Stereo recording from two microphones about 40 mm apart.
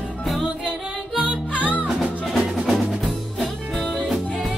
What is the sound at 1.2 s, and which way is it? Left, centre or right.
Music, right.